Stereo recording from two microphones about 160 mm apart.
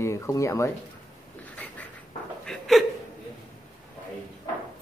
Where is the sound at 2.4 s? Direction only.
5° left (ahead or behind).